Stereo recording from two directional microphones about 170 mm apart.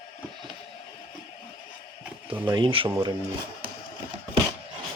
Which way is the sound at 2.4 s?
30° right (ahead or behind).